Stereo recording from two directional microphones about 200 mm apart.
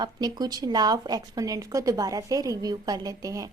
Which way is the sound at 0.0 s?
20° right (ahead or behind).